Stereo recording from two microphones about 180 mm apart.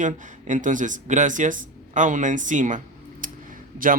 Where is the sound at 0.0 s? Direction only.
45° right (ahead or behind).